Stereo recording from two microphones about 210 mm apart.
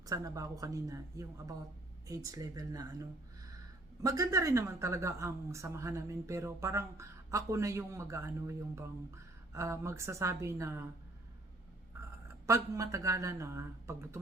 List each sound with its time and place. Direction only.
0.0 s speech: 15° right (ahead or behind)
4.0 s speech: 15° right (ahead or behind)
12.5 s speech: 15° right (ahead or behind)